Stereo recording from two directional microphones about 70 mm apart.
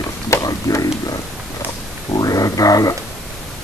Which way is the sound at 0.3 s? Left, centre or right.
Left.